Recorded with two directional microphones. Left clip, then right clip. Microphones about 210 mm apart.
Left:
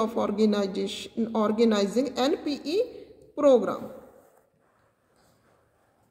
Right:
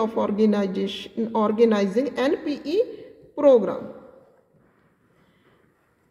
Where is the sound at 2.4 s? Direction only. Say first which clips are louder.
Right 4 dB; 45° left (ahead or behind).